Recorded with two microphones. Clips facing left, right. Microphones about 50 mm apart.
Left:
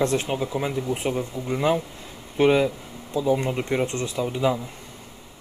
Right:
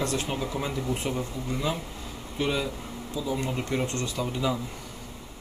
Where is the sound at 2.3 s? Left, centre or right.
Left; by 4.6 s centre.